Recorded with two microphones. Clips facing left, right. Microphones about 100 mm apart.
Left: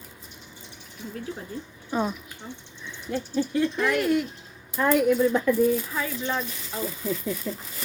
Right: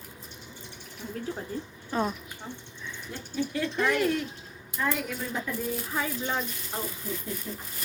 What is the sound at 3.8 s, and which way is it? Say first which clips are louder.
Speech: even; 5° left (ahead or behind).